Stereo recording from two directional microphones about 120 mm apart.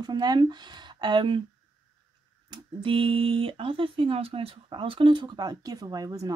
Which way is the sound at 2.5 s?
45° right (ahead or behind).